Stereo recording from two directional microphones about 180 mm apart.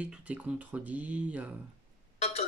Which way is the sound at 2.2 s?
35° left (ahead or behind).